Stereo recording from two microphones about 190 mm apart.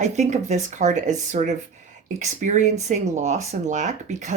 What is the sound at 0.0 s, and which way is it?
A woman's voice, 40° right (ahead or behind).